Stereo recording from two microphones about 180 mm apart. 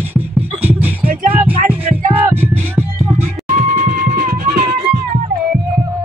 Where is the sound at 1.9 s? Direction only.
45° right (ahead or behind).